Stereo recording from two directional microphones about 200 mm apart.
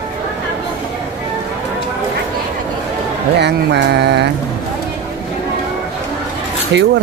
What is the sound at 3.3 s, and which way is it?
Speech, 55° right (ahead or behind).